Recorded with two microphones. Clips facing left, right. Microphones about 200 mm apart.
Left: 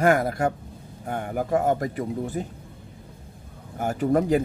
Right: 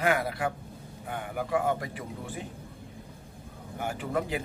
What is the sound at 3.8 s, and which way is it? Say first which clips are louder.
Speech: left 9 dB; 45° left (ahead or behind).